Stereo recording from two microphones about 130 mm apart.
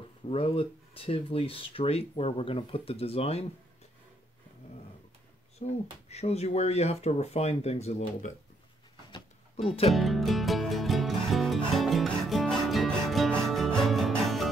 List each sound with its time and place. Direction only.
0.3 s speech: 45° left (ahead or behind)
5.6 s speech: 55° left (ahead or behind)
9.6 s speech: 50° left (ahead or behind)
9.9 s music: centre (ahead or behind)